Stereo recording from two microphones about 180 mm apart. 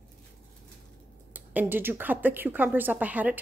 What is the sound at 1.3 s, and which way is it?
Speech, 10° right (ahead or behind).